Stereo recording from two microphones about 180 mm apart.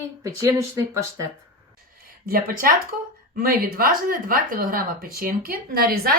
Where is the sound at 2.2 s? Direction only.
55° right (ahead or behind).